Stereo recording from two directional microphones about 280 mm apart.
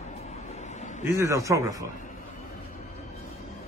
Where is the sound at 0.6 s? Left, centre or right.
Left.